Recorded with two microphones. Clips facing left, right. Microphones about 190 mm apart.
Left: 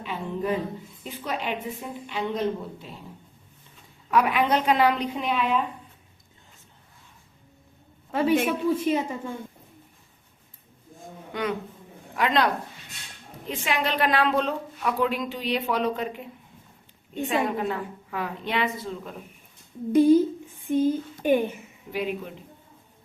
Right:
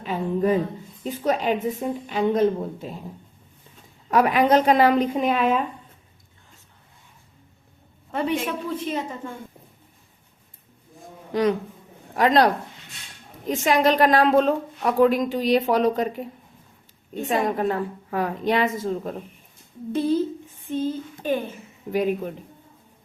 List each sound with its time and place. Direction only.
0.0 s a sound: 45° right (ahead or behind)
1.0 s a woman's voice: 45° right (ahead or behind)
4.1 s a woman's voice: 40° right (ahead or behind)
8.1 s a man's voice: centre (ahead or behind)
11.3 s a woman's voice: 35° right (ahead or behind)
13.5 s a woman's voice: 40° right (ahead or behind)
19.9 s a woman's voice: 15° left (ahead or behind)
20.7 s a sound: 15° left (ahead or behind)
21.9 s a woman's voice: 45° right (ahead or behind)